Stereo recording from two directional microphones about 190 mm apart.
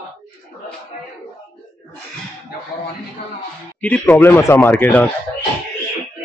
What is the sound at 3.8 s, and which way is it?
Speech, 5° left (ahead or behind).